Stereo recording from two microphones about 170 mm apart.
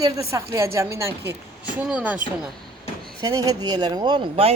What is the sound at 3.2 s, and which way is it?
Speech, 20° right (ahead or behind).